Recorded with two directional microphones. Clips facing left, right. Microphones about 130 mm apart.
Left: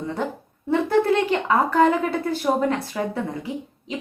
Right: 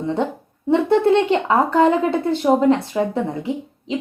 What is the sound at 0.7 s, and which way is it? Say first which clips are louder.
A woman's voice: right 4 dB; 25° right (ahead or behind).